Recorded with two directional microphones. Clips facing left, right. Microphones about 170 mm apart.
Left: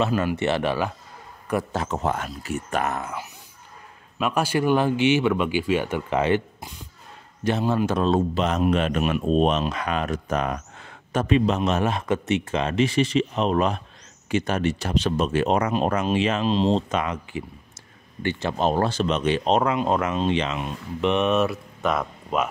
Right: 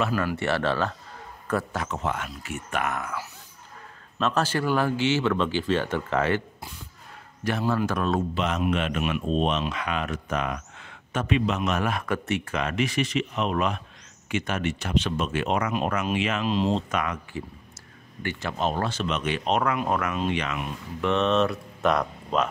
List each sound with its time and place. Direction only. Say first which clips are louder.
0.0 s speech: left 3 dB; 20° left (ahead or behind)
1.7 s speech: left 4 dB; 30° left (ahead or behind)
4.2 s speech: left 2 dB; 10° left (ahead or behind)
8.4 s speech: left 4 dB; 35° left (ahead or behind); by 22.5 s 5° left (ahead or behind)